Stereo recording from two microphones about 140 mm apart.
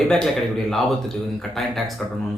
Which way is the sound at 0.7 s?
Centre (ahead or behind).